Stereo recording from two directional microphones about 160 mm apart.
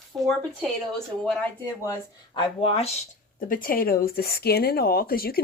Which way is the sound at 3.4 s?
60° left (ahead or behind).